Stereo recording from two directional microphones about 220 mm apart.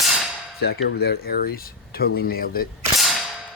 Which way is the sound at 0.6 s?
45° left (ahead or behind).